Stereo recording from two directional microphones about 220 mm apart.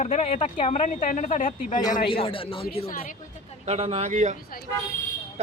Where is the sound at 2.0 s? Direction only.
25° left (ahead or behind).